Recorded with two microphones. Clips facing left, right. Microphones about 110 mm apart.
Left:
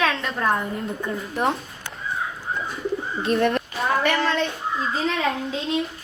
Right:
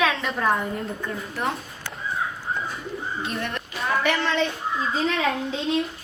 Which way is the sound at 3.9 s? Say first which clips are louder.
Left 2 dB; centre (ahead or behind).